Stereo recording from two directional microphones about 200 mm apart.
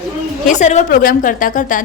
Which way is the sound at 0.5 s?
35° left (ahead or behind).